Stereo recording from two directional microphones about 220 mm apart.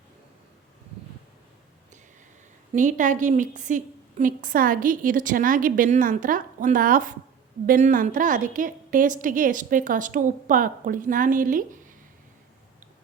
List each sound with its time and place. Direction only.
2.7 s a woman's voice: 35° right (ahead or behind)